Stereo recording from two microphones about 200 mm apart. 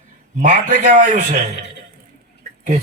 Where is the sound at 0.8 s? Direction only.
40° right (ahead or behind).